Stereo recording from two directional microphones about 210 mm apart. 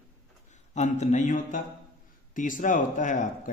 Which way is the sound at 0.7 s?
35° left (ahead or behind).